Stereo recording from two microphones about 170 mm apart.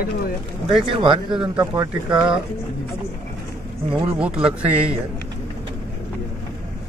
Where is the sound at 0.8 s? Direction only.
30° right (ahead or behind).